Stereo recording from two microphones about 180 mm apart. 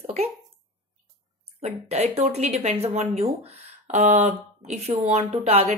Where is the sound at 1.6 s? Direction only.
35° right (ahead or behind).